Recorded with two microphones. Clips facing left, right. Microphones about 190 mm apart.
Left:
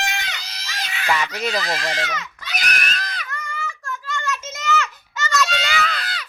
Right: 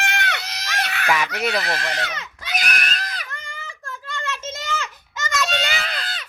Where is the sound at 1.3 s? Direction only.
65° right (ahead or behind).